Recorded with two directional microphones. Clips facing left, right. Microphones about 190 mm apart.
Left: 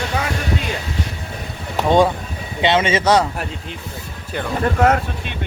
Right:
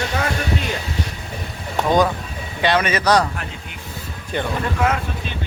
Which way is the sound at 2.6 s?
25° left (ahead or behind).